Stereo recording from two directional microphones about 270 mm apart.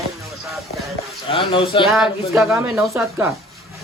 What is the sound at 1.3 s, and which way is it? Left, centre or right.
Speech, centre.